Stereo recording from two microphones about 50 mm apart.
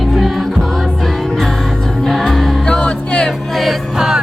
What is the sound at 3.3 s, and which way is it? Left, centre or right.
Music, centre.